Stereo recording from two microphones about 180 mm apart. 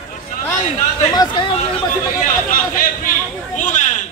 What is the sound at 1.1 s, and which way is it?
Hubbub, 25° left (ahead or behind).